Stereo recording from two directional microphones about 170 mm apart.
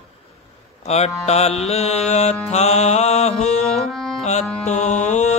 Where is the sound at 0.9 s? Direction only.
40° left (ahead or behind).